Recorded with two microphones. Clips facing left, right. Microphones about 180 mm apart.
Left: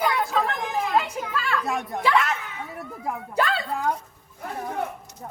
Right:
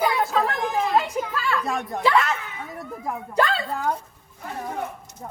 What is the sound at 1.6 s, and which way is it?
Speech, 5° left (ahead or behind).